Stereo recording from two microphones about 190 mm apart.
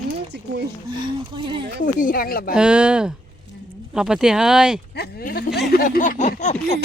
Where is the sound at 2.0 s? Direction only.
50° left (ahead or behind).